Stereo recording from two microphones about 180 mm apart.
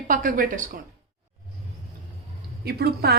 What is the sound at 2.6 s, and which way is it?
Speech, 60° right (ahead or behind).